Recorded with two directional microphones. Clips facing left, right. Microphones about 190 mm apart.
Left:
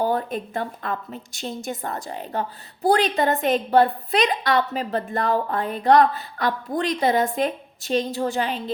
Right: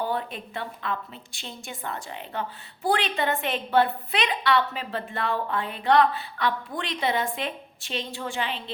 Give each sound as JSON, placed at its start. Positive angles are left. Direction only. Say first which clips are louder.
{"t": 0.0, "sound": "a woman's voice", "louder": "left 6 dB", "side_deg": 45}